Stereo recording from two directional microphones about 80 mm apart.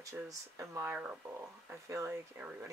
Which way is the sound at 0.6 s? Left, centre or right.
Right.